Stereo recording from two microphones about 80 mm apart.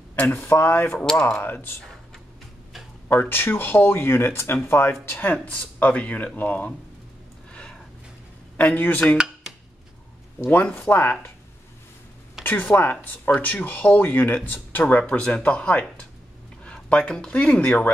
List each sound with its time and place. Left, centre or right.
0.1 s speech: left
3.1 s speech: left
8.5 s speech: left
9.1 s a sound: centre
10.4 s speech: left
12.4 s speech: left